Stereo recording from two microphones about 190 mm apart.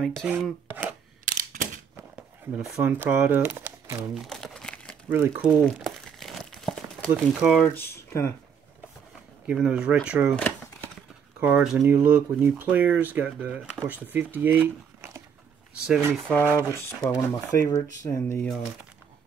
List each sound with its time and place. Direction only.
0.2 s speech: 5° right (ahead or behind)
1.2 s single-lens reflex camera: 45° right (ahead or behind)
2.5 s speech: 5° right (ahead or behind)
4.3 s crumpling: 5° left (ahead or behind)
7.1 s speech: 5° right (ahead or behind); by 8.3 s 15° left (ahead or behind)
9.5 s speech: 5° right (ahead or behind)
10.3 s shuffling cards: 10° left (ahead or behind)
11.3 s speech: 5° right (ahead or behind)
16.3 s speech: 10° left (ahead or behind)